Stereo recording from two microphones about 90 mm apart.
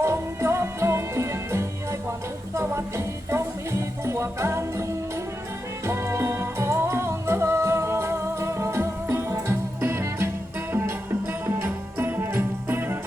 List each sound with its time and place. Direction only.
0.0 s music: 30° right (ahead or behind)